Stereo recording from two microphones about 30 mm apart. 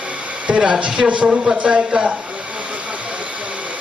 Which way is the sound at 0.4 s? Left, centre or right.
Right.